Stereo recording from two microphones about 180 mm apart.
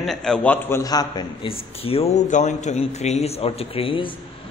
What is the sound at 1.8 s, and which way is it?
A man's voice, 30° left (ahead or behind).